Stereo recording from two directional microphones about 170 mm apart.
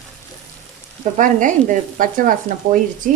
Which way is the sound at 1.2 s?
50° right (ahead or behind).